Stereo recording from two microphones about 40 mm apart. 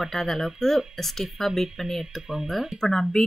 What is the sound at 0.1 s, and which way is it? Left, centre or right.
Speech, centre.